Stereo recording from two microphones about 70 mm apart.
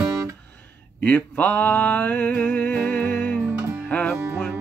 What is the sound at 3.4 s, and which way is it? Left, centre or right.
Music, right.